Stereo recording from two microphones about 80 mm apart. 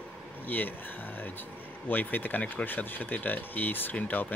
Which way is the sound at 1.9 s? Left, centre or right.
Left.